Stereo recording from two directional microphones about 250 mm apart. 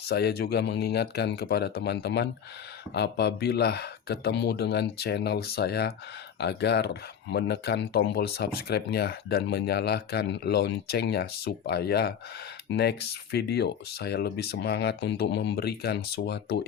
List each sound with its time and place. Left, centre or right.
0.0 s speech: left